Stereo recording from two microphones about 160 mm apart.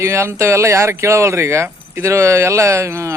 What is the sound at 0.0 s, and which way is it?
Speech, 15° right (ahead or behind).